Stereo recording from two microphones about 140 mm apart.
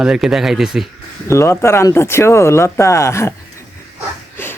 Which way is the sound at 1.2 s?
20° left (ahead or behind).